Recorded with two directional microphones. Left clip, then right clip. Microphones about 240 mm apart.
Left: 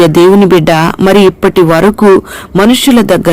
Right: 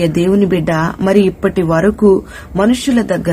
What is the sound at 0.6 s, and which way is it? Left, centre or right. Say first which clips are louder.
Speech: left 8 dB; left.